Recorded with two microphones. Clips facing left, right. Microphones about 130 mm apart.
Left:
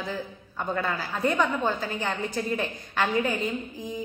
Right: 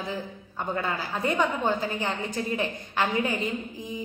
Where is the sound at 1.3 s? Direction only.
15° right (ahead or behind).